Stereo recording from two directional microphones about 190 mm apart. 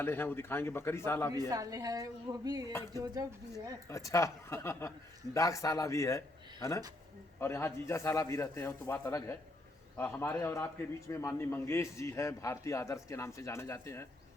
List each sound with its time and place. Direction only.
0.0 s a man's voice: 10° left (ahead or behind)
1.3 s speech: 20° right (ahead or behind)
3.8 s a man's voice: 15° left (ahead or behind)